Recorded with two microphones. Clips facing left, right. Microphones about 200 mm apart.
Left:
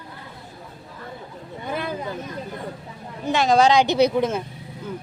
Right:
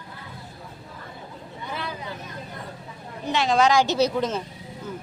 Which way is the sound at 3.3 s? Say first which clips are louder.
Left 3 dB; 45° left (ahead or behind).